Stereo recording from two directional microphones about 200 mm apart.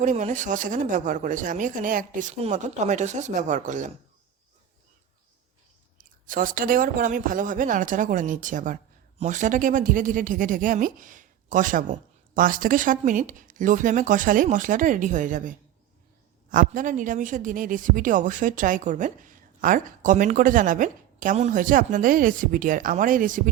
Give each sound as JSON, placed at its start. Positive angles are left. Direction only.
{"t": 0.0, "sound": "speech", "side_deg": -35}
{"t": 6.0, "sound": "speech", "side_deg": -40}